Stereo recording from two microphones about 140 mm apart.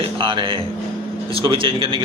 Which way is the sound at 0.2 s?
35° right (ahead or behind).